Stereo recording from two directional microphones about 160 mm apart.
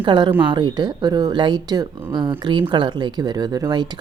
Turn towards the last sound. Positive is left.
turn(degrees=-25)  # may be behind; listen again after turning